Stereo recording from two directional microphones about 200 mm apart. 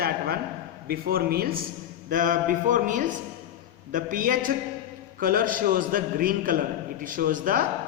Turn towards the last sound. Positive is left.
turn(degrees=-45)  # may be behind; listen again after turning